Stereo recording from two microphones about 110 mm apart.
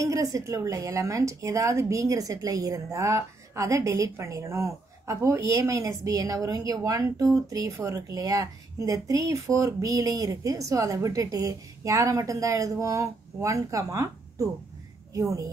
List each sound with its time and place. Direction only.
0.0 s speech: 30° right (ahead or behind)